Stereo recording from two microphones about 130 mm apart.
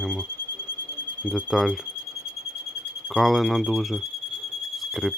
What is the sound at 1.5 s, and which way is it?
Speech, centre (ahead or behind).